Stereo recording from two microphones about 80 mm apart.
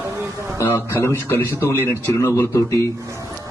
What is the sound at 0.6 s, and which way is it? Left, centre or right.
A man's voice, left.